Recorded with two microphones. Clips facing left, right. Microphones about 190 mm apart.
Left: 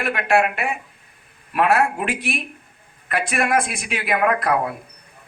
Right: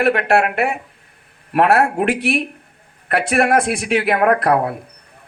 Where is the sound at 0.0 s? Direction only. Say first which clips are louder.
Right 4 dB; 65° right (ahead or behind).